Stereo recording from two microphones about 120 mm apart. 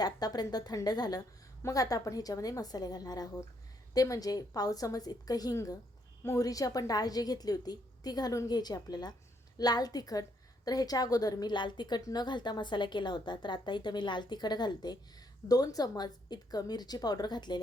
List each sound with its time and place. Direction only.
0.0 s a woman's voice: 35° left (ahead or behind)